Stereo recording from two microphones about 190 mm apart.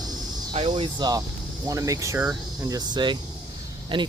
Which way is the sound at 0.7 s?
25° right (ahead or behind).